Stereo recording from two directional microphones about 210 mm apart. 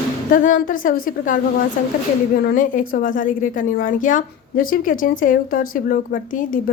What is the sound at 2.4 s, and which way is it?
A woman's voice, 40° left (ahead or behind).